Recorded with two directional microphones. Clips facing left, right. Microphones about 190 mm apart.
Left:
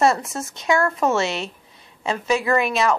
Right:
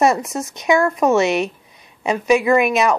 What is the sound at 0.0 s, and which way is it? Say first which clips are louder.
Speech: right 3 dB; 15° right (ahead or behind).